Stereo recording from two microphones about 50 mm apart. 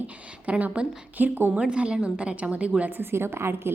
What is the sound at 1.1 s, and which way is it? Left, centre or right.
Speech, right.